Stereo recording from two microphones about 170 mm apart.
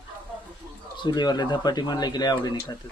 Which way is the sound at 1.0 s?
25° left (ahead or behind).